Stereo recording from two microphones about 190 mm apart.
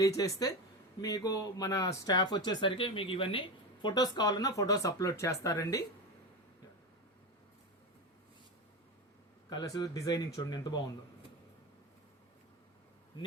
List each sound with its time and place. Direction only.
0.2 s speech: 20° left (ahead or behind)
9.5 s speech: 20° left (ahead or behind)